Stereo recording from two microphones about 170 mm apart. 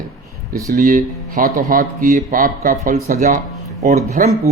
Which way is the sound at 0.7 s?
55° right (ahead or behind).